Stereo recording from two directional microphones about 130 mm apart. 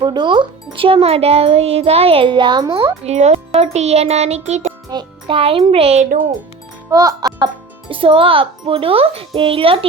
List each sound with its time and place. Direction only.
0.0 s a child's voice: 35° right (ahead or behind)
2.7 s a child's voice: 50° right (ahead or behind)
4.9 s a child's voice: 35° right (ahead or behind)
5.4 s a child's voice: 45° right (ahead or behind)
6.9 s a child's voice: 25° right (ahead or behind); by 9.8 s 45° right (ahead or behind)